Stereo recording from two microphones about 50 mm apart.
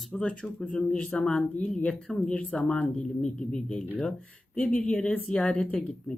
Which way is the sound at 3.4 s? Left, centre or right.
Centre.